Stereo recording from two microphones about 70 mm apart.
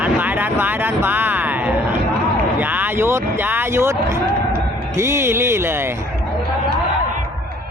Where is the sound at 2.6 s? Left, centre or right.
Right.